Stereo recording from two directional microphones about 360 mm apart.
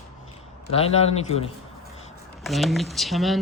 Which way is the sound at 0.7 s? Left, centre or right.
Centre.